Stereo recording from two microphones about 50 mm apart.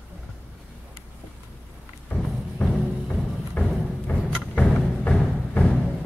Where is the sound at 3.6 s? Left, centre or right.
Left.